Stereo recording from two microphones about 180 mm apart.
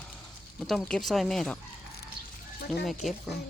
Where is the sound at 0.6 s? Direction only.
Centre (ahead or behind).